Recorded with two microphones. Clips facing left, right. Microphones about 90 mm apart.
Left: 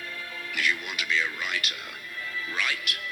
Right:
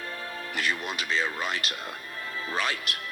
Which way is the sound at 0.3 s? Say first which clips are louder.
Left 1 dB; 35° right (ahead or behind).